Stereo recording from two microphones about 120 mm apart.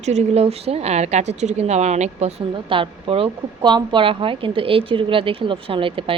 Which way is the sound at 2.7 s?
45° right (ahead or behind).